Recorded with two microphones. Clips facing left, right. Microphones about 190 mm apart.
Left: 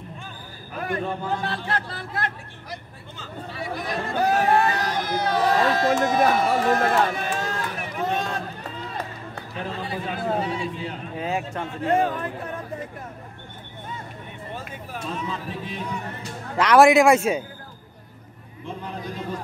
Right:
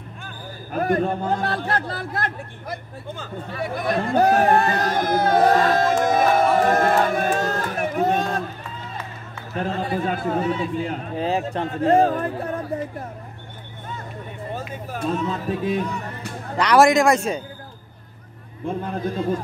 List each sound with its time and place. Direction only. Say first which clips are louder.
0.7 s a man's voice: right 6 dB; 45° right (ahead or behind)
9.6 s a man's voice: right 7 dB; 50° right (ahead or behind)
11.1 s a man's voice: right 4 dB; 35° right (ahead or behind)
14.9 s a man's voice: right 7 dB; 45° right (ahead or behind)
16.5 s a man's voice: left 1 dB; 5° left (ahead or behind)
18.7 s a man's voice: right 7 dB; 50° right (ahead or behind)